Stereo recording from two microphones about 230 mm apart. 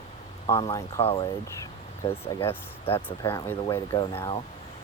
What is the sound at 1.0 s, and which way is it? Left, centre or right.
Speech, left.